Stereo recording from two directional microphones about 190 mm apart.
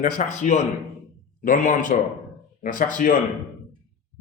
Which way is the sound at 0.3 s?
40° left (ahead or behind).